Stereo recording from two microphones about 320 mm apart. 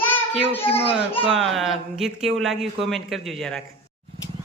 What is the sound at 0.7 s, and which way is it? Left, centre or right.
Speech, centre.